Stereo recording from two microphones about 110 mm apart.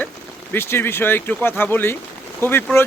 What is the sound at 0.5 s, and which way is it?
Speech, 20° left (ahead or behind).